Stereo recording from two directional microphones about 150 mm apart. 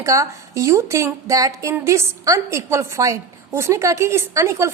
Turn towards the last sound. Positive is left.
turn(degrees=-20)  # may be behind; listen again after turning